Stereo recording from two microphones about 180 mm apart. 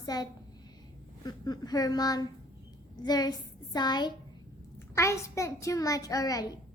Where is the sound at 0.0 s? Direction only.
20° left (ahead or behind).